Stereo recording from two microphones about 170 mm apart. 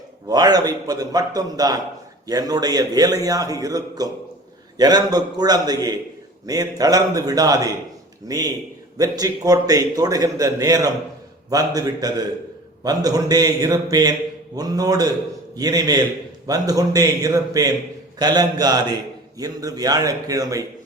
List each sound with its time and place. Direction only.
0.3 s a man's voice: 20° right (ahead or behind)